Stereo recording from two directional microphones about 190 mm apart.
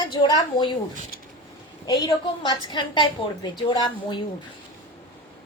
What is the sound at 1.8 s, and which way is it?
A woman's voice, 20° left (ahead or behind).